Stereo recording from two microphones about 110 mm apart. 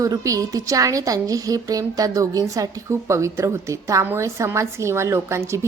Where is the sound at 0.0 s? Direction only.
30° right (ahead or behind).